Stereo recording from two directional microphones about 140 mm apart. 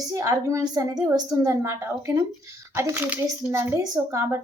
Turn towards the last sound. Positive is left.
turn(degrees=-25)  # may be behind; listen again after turning